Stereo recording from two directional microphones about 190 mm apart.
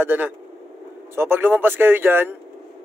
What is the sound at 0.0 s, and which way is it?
Speech, 10° right (ahead or behind).